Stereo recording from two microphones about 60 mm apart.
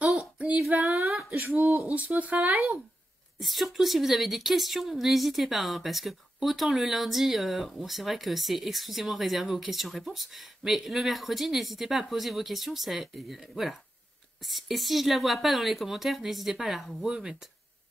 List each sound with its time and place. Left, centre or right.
0.8 s a sound: right
1.5 s speech: right
3.3 s a woman's voice: centre